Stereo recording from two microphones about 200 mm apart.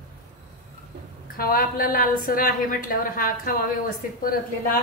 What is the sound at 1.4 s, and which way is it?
A woman's voice, 45° left (ahead or behind).